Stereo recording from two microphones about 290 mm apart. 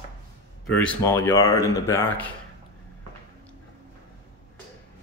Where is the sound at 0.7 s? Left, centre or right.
Centre.